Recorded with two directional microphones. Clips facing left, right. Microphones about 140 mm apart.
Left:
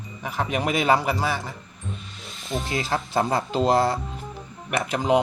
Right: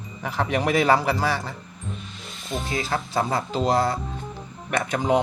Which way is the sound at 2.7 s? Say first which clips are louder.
Left 1 dB; 25° left (ahead or behind).